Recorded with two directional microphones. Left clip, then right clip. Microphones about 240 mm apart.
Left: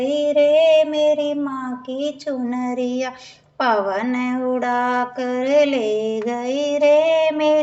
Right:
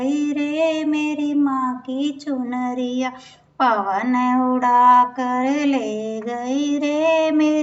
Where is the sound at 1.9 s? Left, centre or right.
Left.